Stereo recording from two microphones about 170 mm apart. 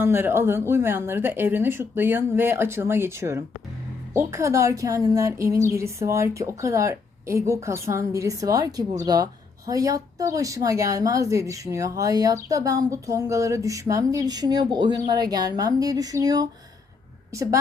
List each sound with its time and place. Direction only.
0.0 s speech: 15° right (ahead or behind)